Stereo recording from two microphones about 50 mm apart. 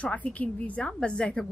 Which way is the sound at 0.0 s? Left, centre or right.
Left.